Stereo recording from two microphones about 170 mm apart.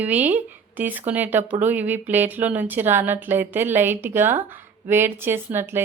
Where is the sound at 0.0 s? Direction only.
10° right (ahead or behind).